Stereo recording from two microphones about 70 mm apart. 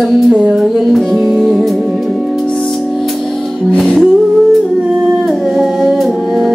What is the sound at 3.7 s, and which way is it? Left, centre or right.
Music, centre.